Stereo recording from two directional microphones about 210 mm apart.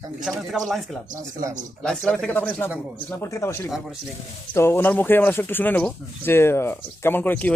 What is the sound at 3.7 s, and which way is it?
Speech, centre (ahead or behind).